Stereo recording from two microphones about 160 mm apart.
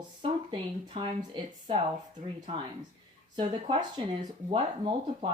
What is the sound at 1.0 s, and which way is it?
Speech, 35° right (ahead or behind).